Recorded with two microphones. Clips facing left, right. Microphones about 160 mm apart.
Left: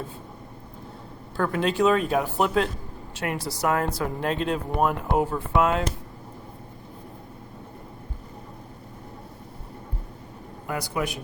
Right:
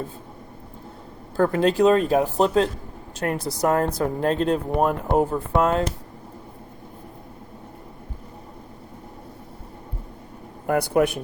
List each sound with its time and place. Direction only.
1.4 s speech: 40° right (ahead or behind)
3.2 s speech: 40° right (ahead or behind)
10.7 s speech: 55° right (ahead or behind)